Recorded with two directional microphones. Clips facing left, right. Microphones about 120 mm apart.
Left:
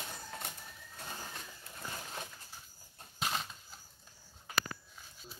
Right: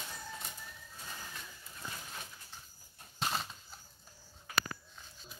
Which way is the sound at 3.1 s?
Centre (ahead or behind).